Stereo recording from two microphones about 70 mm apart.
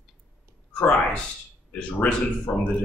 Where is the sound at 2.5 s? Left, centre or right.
Left.